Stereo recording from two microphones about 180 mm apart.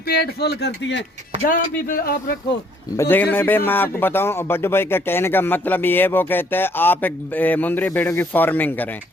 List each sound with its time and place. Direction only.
0.1 s speech: 60° left (ahead or behind)
1.5 s speech: 55° left (ahead or behind)
3.0 s speech: 10° left (ahead or behind)